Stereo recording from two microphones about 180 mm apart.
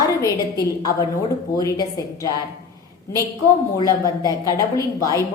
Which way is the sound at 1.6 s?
20° left (ahead or behind).